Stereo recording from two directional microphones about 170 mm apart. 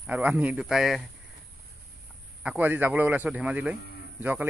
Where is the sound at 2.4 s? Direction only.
10° right (ahead or behind).